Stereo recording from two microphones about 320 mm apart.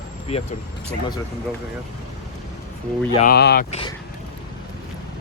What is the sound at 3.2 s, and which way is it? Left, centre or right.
Speech, left.